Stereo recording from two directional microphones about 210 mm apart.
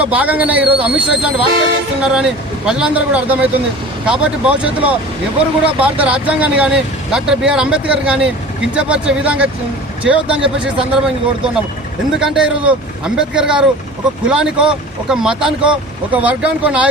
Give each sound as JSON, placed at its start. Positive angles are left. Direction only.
{"t": 0.0, "sound": "a man's voice", "side_deg": -5}